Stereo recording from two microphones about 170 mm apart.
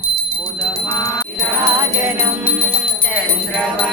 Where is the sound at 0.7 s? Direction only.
20° left (ahead or behind).